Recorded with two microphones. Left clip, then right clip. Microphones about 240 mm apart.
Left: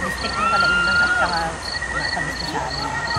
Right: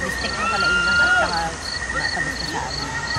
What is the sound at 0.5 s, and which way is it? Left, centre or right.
Speech, centre.